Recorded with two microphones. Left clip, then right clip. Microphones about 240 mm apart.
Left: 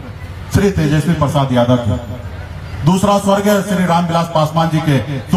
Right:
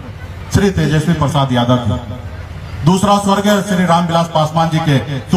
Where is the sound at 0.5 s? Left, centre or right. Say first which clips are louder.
Even; right.